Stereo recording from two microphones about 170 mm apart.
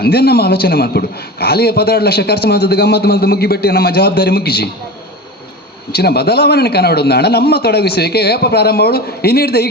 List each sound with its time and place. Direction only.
0.0 s a man's voice: 70° left (ahead or behind)
5.9 s a man's voice: 70° left (ahead or behind)